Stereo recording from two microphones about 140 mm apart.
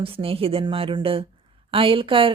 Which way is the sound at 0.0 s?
40° right (ahead or behind).